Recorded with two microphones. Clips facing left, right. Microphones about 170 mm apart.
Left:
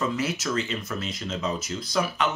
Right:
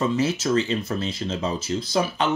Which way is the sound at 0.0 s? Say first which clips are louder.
Right 5 dB; 25° right (ahead or behind).